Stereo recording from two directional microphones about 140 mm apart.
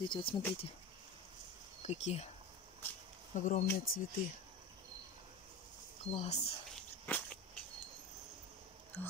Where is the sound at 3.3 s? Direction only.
60° left (ahead or behind).